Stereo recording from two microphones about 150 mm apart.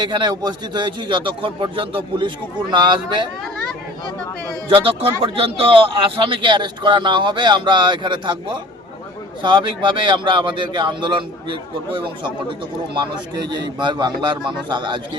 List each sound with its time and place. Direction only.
0.1 s a man's voice: 30° right (ahead or behind)
4.7 s a man's voice: 40° right (ahead or behind)